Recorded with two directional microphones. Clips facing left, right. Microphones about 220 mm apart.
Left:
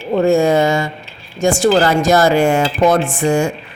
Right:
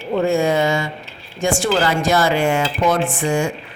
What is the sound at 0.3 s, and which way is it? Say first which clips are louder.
A man's voice: left 5 dB; 45° left (ahead or behind).